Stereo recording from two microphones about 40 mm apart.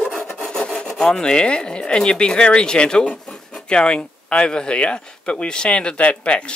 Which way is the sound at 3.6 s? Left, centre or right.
Left.